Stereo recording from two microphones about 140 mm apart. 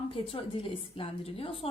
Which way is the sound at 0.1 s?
40° left (ahead or behind).